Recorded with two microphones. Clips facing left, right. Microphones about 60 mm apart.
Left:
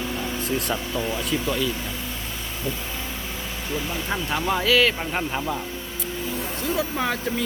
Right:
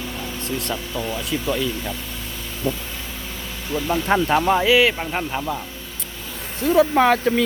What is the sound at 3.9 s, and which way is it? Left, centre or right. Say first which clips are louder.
Speech: right 13 dB; right.